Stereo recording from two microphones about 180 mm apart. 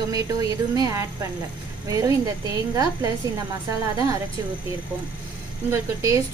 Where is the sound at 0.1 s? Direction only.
20° right (ahead or behind).